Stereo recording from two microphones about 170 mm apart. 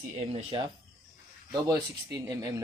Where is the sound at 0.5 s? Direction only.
25° right (ahead or behind).